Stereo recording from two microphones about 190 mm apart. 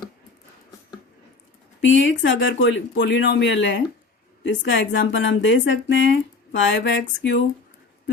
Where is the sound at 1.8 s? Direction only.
80° left.